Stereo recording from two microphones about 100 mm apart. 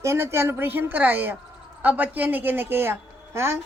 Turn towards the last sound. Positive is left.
turn(degrees=-25)  # may be behind; listen again after turning